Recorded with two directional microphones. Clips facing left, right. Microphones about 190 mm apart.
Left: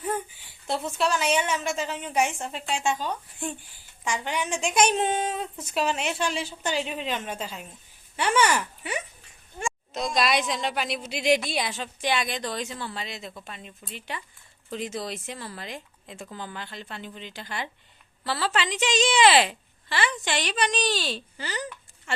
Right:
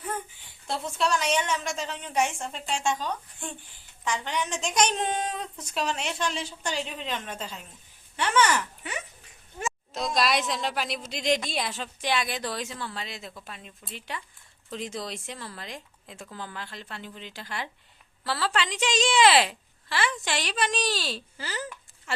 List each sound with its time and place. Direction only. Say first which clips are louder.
0.9 s a woman's voice: left 1 dB; 5° left (ahead or behind)
9.6 s a woman's voice: left 1 dB; centre (ahead or behind)